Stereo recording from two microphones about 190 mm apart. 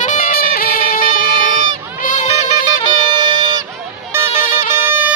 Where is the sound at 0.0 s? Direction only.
45° left (ahead or behind).